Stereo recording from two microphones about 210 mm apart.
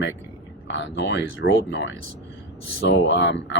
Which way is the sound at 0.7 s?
60° left (ahead or behind).